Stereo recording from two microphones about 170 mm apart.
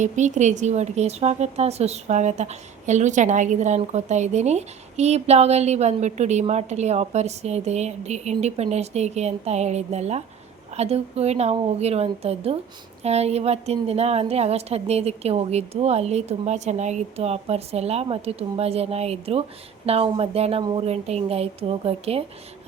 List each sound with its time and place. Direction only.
0.0 s a woman's voice: 45° right (ahead or behind)